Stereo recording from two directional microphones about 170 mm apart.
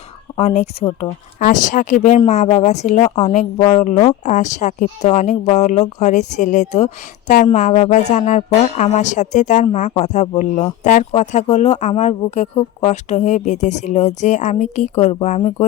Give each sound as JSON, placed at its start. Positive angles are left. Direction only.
{"t": 0.3, "sound": "speech", "side_deg": 40}
{"t": 15.4, "sound": "speech", "side_deg": 30}